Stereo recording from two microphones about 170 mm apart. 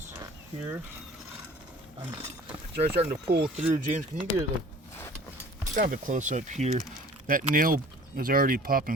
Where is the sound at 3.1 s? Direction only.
65° right (ahead or behind).